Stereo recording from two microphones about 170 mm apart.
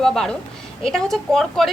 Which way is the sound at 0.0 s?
5° left (ahead or behind).